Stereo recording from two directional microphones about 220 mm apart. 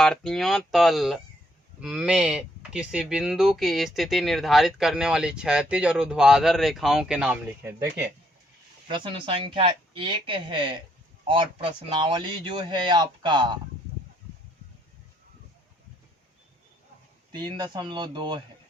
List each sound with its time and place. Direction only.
0.0 s speech: 5° left (ahead or behind)
8.9 s a man's voice: 20° right (ahead or behind)
17.3 s a man's voice: 20° right (ahead or behind)